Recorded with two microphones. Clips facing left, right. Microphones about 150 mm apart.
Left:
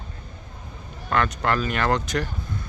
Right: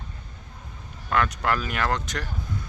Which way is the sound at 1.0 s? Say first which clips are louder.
Left 1 dB; 5° right (ahead or behind).